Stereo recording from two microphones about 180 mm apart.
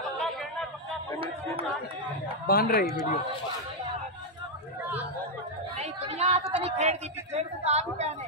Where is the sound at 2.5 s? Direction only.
55° left (ahead or behind).